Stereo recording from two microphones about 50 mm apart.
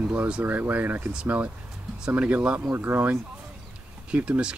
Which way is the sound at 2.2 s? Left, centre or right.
Right.